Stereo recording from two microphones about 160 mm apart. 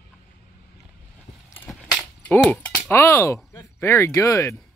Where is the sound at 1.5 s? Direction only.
10° left (ahead or behind).